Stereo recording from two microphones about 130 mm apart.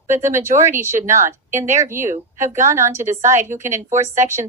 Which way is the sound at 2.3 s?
70° right (ahead or behind).